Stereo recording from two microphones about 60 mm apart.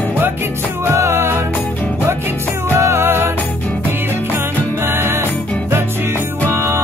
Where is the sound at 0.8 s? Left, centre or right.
Right.